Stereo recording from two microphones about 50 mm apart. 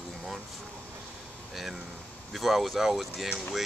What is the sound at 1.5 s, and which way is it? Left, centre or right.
Speech, centre.